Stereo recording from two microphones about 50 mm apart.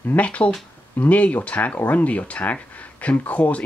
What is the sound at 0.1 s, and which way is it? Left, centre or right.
Speech, left.